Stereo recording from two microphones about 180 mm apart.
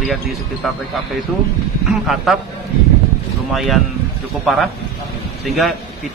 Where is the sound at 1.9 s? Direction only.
Centre (ahead or behind).